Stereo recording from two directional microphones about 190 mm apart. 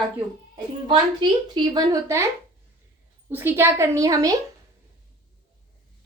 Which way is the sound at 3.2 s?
10° right (ahead or behind).